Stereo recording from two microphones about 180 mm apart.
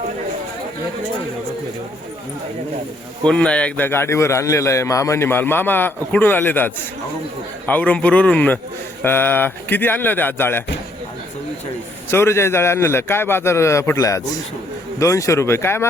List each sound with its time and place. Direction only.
3.2 s a man's voice: 5° left (ahead or behind)
12.1 s a man's voice: 15° left (ahead or behind)